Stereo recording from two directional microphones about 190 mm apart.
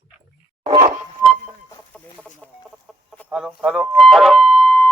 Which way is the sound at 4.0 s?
Centre (ahead or behind).